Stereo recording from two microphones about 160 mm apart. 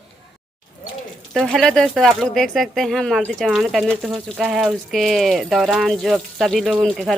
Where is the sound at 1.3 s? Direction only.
Centre (ahead or behind).